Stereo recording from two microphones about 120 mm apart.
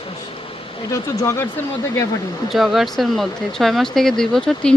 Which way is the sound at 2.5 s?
Centre (ahead or behind).